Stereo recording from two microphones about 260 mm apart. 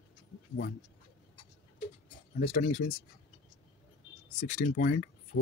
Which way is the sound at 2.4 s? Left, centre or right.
Left.